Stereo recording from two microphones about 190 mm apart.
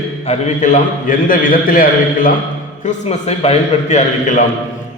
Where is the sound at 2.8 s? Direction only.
35° left (ahead or behind).